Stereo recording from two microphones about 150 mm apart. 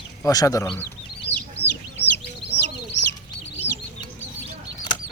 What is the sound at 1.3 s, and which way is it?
Chicken, 45° right (ahead or behind).